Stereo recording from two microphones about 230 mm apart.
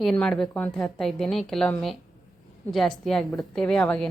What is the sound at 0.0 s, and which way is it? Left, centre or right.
A woman's voice, centre.